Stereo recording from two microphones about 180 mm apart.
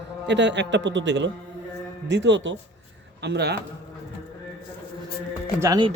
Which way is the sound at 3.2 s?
65° right (ahead or behind).